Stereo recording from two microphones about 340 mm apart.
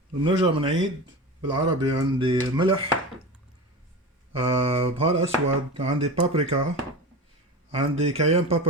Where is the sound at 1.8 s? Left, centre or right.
Centre.